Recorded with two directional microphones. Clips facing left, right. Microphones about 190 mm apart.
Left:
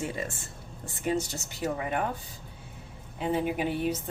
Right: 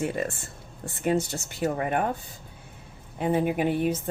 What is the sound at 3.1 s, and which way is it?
Speech, 55° right (ahead or behind).